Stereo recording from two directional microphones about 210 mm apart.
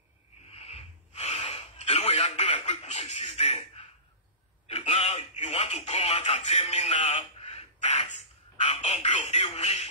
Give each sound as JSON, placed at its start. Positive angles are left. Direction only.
{"t": 0.5, "sound": "gasp", "side_deg": 30}
{"t": 4.6, "sound": "telephone", "side_deg": 30}
{"t": 8.5, "sound": "a sound", "side_deg": 30}